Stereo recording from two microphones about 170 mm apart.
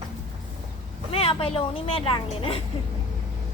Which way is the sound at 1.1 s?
35° left (ahead or behind).